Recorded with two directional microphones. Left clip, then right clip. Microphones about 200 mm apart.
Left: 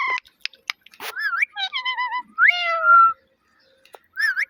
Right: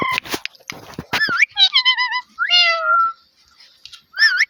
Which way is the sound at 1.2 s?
15° left (ahead or behind).